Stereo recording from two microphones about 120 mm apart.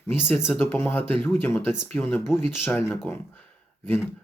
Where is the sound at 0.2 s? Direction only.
20° left (ahead or behind).